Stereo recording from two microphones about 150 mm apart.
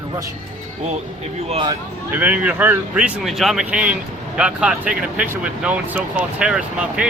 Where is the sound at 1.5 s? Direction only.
30° right (ahead or behind).